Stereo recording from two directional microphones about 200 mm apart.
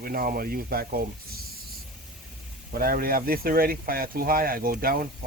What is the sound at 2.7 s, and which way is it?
Speech, 50° right (ahead or behind).